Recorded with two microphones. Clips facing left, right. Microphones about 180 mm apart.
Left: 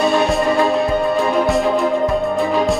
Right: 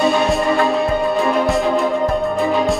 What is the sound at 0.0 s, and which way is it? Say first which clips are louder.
Music: even; centre (ahead or behind).